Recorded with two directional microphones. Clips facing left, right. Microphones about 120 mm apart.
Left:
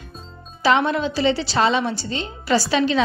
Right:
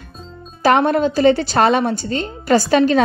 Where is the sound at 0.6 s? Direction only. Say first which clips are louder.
Right 4 dB; 50° right (ahead or behind).